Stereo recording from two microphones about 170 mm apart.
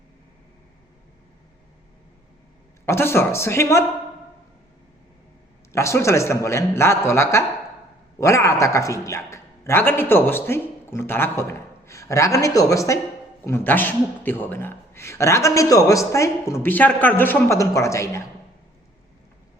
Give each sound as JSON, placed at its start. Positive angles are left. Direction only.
{"t": 2.8, "sound": "a man's voice", "side_deg": 15}
{"t": 5.7, "sound": "a man's voice", "side_deg": 15}